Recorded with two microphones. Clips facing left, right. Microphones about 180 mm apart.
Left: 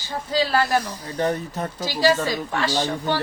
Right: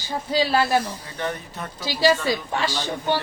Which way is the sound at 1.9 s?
15° right (ahead or behind).